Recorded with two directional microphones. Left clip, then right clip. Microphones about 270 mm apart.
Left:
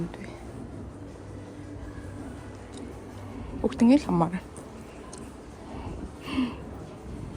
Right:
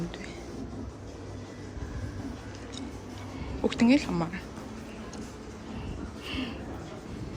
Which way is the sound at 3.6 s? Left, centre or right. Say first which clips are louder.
Left 2 dB; centre.